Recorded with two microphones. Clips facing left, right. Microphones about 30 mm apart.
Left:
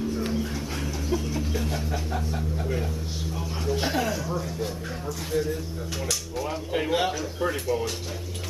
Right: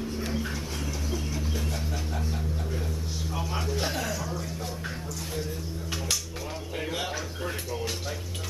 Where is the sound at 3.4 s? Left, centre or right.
Centre.